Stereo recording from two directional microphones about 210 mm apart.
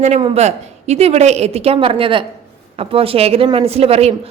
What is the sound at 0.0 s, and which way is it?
A woman's voice, 30° right (ahead or behind).